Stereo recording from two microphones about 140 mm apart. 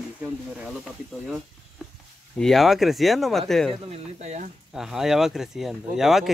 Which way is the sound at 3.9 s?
55° right (ahead or behind).